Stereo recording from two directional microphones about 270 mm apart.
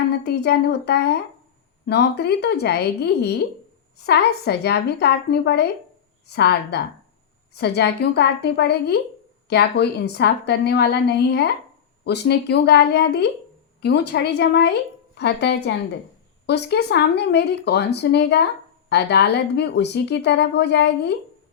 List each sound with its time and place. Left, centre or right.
0.3 s a woman's voice: left